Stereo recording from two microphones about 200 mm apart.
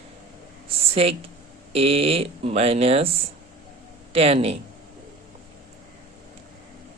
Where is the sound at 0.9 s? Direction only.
30° right (ahead or behind).